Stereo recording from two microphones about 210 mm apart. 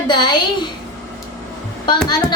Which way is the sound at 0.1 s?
20° left (ahead or behind).